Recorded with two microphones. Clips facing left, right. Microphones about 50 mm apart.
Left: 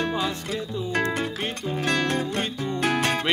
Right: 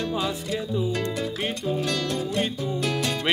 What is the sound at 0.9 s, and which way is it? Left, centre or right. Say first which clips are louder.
Music: left 2 dB; left.